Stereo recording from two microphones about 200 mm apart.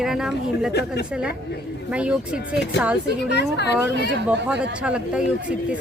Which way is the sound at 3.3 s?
55° left (ahead or behind).